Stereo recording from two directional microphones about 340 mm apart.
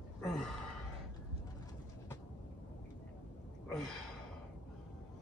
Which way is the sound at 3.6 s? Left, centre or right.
Centre.